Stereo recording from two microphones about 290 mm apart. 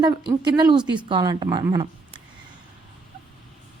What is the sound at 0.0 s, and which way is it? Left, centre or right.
A woman's voice, centre.